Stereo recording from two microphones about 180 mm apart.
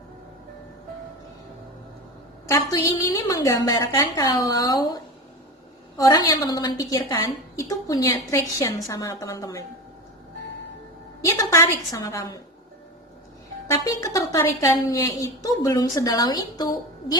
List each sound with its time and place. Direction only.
2.5 s a woman's voice: 15° left (ahead or behind)
6.0 s a woman's voice: 20° left (ahead or behind)
11.2 s a woman's voice: 20° left (ahead or behind)
13.7 s a woman's voice: 20° left (ahead or behind)